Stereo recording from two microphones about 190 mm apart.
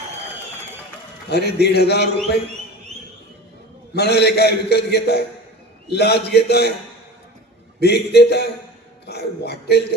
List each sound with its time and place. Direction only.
1.3 s a man's voice: 60° left (ahead or behind)
3.9 s a man's voice: 60° left (ahead or behind)
7.8 s a man's voice: 60° left (ahead or behind)